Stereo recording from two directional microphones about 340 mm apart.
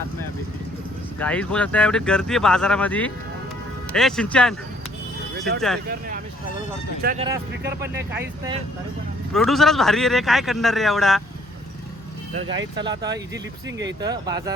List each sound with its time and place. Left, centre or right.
1.2 s speech: centre
7.0 s speech: right
7.8 s speech: centre
12.4 s speech: right
12.7 s speech: centre
13.7 s speech: right
14.0 s speech: centre